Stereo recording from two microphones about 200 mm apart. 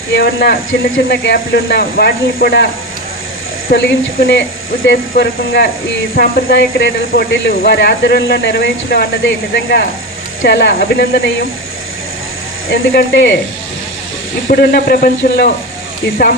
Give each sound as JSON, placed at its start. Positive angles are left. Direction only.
{"t": 0.1, "sound": "speech", "side_deg": 50}
{"t": 3.7, "sound": "speech", "side_deg": 55}
{"t": 12.7, "sound": "speech", "side_deg": 50}
{"t": 14.4, "sound": "speech", "side_deg": 45}